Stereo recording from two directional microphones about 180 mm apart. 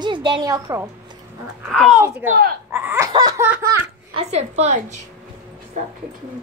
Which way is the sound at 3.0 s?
20° right (ahead or behind).